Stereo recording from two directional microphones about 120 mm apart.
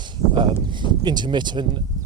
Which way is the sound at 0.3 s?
40° right (ahead or behind).